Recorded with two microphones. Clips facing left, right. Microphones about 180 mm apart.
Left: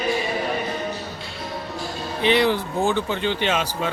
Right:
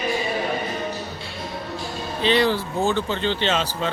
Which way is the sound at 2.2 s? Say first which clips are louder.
Left 1 dB; 15° left (ahead or behind).